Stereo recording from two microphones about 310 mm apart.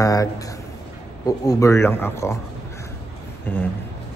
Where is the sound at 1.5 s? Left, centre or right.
Centre.